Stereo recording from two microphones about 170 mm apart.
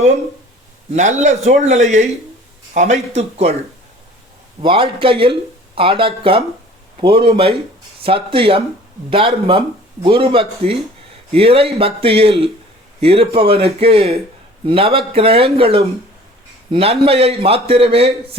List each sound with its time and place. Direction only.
0.9 s a man's voice: 45° right (ahead or behind)
4.6 s speech: 30° right (ahead or behind)